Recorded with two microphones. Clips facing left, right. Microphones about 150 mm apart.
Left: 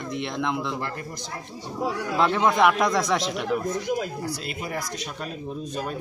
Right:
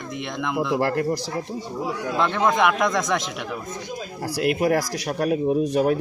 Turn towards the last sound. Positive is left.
turn(degrees=-65)  # may be behind; listen again after turning